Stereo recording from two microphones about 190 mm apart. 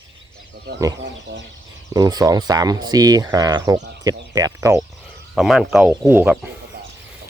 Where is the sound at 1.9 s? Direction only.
20° right (ahead or behind).